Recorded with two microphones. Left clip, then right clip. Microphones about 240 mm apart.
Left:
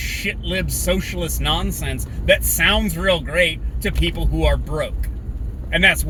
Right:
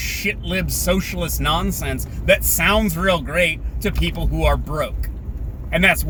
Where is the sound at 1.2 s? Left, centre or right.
Centre.